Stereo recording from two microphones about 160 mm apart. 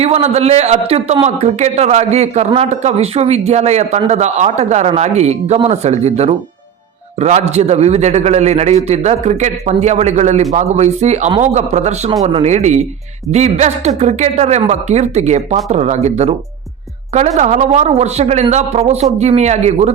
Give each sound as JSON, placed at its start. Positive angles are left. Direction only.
{"t": 0.0, "sound": "a man's voice", "side_deg": -40}